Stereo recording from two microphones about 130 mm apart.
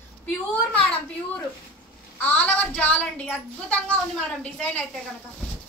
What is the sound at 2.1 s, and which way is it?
A woman's voice, 15° left (ahead or behind).